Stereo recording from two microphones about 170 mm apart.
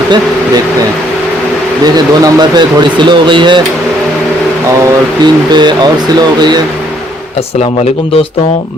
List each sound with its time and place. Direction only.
1.8 s speech: 25° right (ahead or behind)
5.2 s speech: 25° right (ahead or behind)